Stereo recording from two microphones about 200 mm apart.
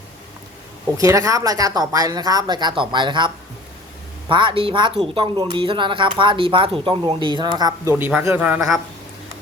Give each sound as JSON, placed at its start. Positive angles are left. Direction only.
{"t": 0.9, "sound": "speech", "side_deg": -15}